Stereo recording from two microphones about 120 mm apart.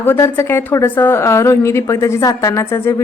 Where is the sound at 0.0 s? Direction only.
20° left (ahead or behind).